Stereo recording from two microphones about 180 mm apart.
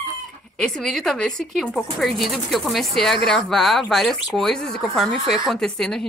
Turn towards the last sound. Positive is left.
turn(degrees=5)  # may be behind; listen again after turning